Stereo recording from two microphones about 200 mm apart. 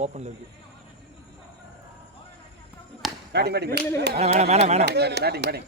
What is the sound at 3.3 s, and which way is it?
Speech, 55° right (ahead or behind).